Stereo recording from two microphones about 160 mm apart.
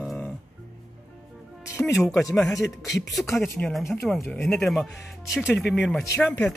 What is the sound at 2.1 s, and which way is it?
Speech, 20° left (ahead or behind).